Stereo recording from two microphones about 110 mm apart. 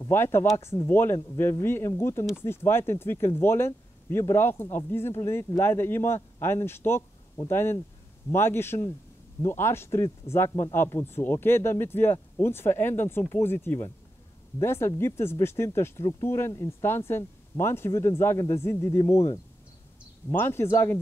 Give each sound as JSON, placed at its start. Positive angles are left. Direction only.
{"t": 0.0, "sound": "speech", "side_deg": 20}
{"t": 20.2, "sound": "speech", "side_deg": 20}